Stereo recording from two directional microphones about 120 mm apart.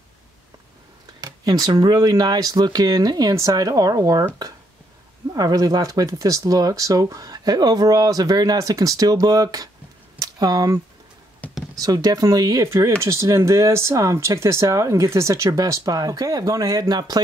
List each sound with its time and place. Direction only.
1.2 s speech: 30° right (ahead or behind)
5.3 s speech: 30° right (ahead or behind)
10.1 s a sound: 30° right (ahead or behind)
11.7 s speech: 30° right (ahead or behind)